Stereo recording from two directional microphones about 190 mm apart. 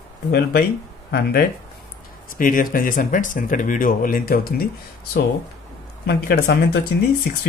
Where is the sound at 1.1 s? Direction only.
55° left (ahead or behind).